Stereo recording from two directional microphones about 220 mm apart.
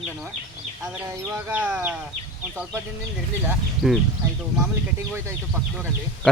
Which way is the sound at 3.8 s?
Centre (ahead or behind).